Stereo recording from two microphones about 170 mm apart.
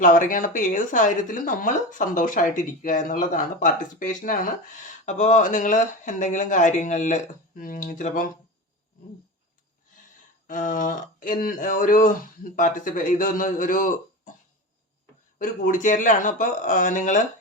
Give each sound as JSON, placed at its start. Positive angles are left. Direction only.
{"t": 0.0, "sound": "speech", "side_deg": 50}
{"t": 10.4, "sound": "speech", "side_deg": 50}
{"t": 15.4, "sound": "speech", "side_deg": 50}